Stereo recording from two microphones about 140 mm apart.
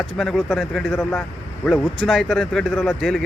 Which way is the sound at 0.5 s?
10° left (ahead or behind).